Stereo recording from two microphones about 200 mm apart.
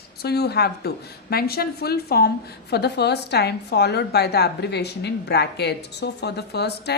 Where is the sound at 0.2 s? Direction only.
55° left (ahead or behind).